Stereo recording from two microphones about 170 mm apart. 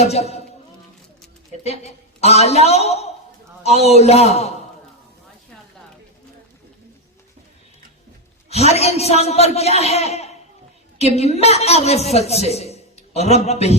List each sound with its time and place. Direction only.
0.0 s a man's voice: 40° left (ahead or behind)
1.6 s a man's voice: 40° left (ahead or behind)
8.4 s a man's voice: 40° left (ahead or behind)